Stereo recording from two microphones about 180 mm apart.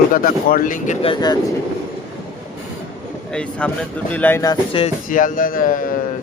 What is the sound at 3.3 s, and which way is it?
Speech, 5° left (ahead or behind).